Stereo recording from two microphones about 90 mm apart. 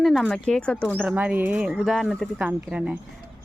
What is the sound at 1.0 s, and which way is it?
A woman's voice, 15° right (ahead or behind).